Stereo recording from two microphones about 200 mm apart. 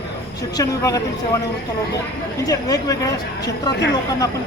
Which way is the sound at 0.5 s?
15° left (ahead or behind).